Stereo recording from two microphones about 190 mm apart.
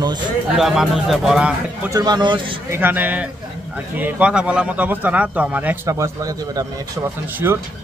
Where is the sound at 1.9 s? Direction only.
20° right (ahead or behind).